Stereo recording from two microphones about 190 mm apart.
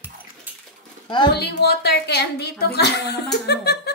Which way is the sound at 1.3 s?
60° left (ahead or behind).